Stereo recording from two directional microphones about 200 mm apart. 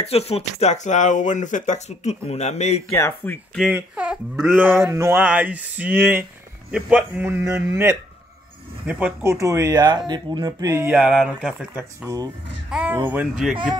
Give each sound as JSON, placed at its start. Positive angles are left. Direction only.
{"t": 0.0, "sound": "speech", "side_deg": 30}
{"t": 2.9, "sound": "speech", "side_deg": 10}
{"t": 3.5, "sound": "speech", "side_deg": -5}
{"t": 10.9, "sound": "speech", "side_deg": -5}